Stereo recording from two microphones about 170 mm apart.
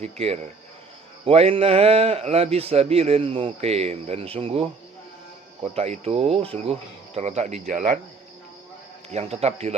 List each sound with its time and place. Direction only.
0.0 s a man's voice: 40° right (ahead or behind)
5.7 s a man's voice: 35° right (ahead or behind)
9.1 s a man's voice: 40° right (ahead or behind)